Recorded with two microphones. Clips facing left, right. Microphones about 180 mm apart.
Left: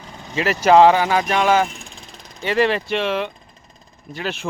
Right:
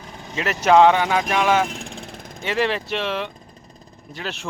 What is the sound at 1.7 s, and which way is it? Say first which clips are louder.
Vehicle: right 7 dB; 65° right (ahead or behind).